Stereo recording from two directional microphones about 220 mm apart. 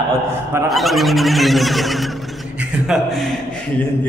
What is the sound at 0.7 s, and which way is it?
Neigh, centre (ahead or behind).